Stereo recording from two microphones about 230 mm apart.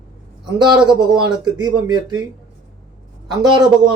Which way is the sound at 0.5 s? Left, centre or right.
Centre.